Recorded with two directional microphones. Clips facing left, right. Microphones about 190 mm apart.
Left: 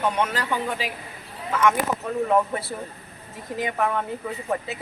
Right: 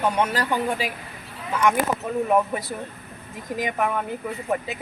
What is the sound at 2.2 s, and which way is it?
A woman's voice, 15° right (ahead or behind).